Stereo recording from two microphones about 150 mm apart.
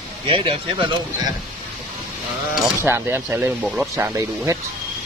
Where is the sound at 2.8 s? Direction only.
15° right (ahead or behind).